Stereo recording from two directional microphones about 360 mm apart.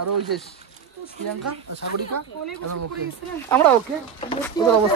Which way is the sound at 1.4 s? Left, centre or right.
Right.